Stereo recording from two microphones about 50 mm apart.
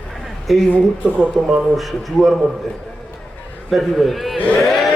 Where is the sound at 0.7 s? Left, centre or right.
Right.